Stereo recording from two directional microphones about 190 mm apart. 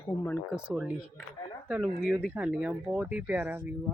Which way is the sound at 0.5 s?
5° right (ahead or behind).